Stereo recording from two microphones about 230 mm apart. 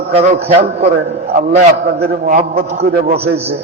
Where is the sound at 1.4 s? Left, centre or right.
Right.